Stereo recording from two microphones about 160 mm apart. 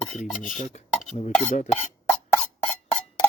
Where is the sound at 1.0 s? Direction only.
50° left (ahead or behind).